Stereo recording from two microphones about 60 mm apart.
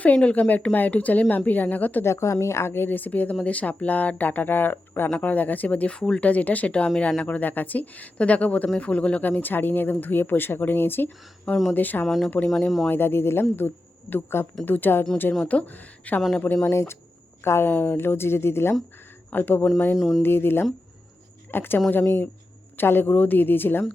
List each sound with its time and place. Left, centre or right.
0.0 s speech: left
2.0 s speech: left
12.0 s speech: centre
12.9 s a woman's voice: left
16.6 s speech: left
17.7 s speech: left
20.0 s speech: centre
20.2 s speech: left